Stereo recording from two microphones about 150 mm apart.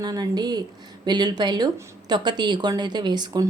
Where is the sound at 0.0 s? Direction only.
25° right (ahead or behind).